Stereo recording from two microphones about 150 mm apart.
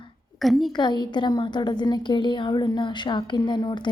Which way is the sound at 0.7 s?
30° left (ahead or behind).